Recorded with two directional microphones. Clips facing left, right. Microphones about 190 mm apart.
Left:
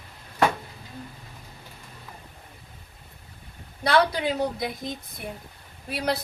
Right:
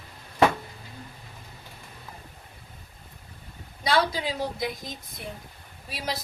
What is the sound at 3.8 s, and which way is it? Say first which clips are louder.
Speech: left 3 dB; 60° left (ahead or behind).